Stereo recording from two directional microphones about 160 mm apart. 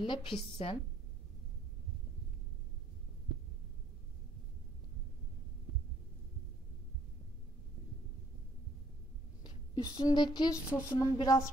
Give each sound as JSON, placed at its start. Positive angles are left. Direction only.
{"t": 0.0, "sound": "a woman's voice", "side_deg": 30}
{"t": 9.4, "sound": "a woman's voice", "side_deg": 25}